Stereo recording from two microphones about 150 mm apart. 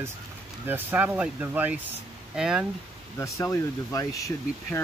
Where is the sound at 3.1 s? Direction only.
20° left (ahead or behind).